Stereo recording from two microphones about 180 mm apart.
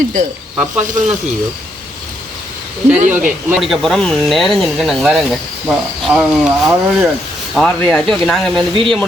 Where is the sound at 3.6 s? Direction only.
Centre (ahead or behind).